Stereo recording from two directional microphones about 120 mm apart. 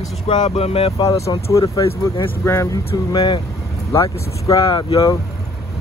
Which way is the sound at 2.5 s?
25° left (ahead or behind).